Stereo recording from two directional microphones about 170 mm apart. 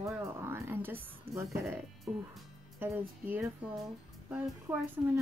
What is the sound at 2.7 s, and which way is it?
Speech, 10° right (ahead or behind).